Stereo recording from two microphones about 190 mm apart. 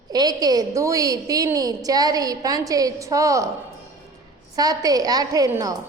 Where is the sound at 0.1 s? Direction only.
20° right (ahead or behind).